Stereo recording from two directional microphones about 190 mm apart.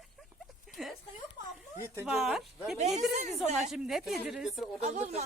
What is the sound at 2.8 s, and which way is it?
Speech, 35° right (ahead or behind).